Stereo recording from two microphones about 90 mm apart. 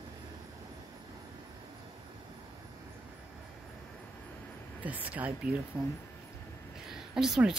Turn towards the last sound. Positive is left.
turn(degrees=-5)  # may be behind; listen again after turning